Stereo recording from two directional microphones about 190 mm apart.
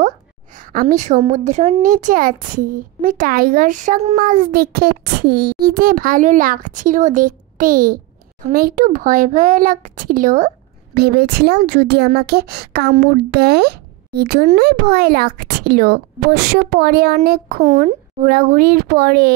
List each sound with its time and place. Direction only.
0.6 s a child's voice: 45° right (ahead or behind)
4.2 s a child's voice: 50° right (ahead or behind)
11.0 s speech: 55° right (ahead or behind); by 18.3 s 35° right (ahead or behind)
18.3 s a child's voice: 50° right (ahead or behind)